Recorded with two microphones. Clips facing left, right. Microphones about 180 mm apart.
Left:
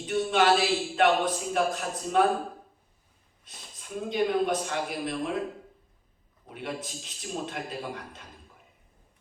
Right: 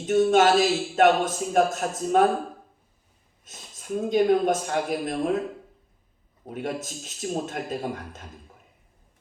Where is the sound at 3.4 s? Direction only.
45° right (ahead or behind).